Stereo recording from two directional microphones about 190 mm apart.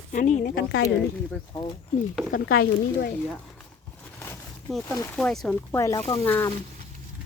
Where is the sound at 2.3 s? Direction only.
50° left (ahead or behind).